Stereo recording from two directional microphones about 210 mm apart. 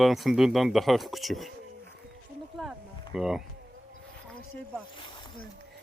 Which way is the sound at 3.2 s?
Centre (ahead or behind).